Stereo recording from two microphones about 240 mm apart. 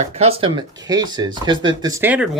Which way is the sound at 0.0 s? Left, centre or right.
Right.